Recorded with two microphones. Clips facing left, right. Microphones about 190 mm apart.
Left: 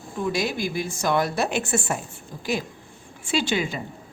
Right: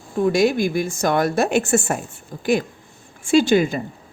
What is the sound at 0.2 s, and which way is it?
A woman's voice, 50° right (ahead or behind).